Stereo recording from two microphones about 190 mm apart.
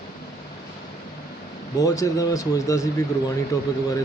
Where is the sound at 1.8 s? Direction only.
20° left (ahead or behind).